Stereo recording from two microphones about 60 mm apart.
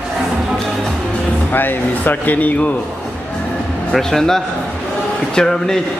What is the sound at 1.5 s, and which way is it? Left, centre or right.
A man's voice, left.